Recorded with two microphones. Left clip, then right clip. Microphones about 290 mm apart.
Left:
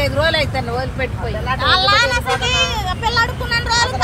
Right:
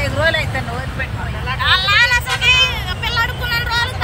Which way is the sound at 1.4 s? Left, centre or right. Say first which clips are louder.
Left 1 dB; left.